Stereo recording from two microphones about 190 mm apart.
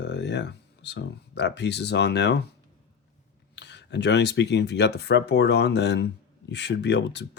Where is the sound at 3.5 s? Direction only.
65° left (ahead or behind).